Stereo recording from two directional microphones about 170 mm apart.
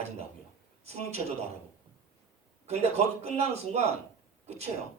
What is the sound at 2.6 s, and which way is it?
A man's voice, 40° right (ahead or behind).